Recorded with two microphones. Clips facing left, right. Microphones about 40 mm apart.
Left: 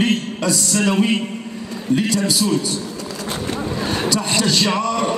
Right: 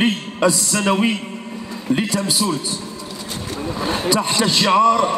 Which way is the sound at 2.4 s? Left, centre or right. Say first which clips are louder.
Left 1 dB; centre.